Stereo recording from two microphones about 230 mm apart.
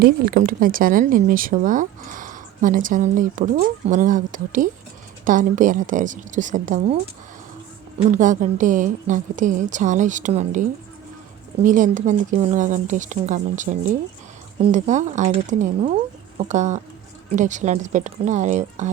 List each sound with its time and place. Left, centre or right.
0.0 s speech: right
8.1 s speech: right